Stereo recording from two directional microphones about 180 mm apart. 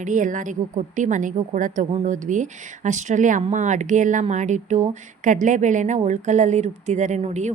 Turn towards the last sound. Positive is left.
turn(degrees=-40)  # may be behind; listen again after turning